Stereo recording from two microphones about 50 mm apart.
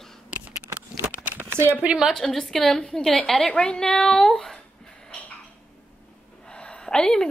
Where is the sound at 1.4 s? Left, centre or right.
Right.